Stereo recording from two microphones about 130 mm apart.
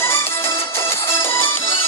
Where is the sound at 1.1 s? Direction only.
20° left (ahead or behind).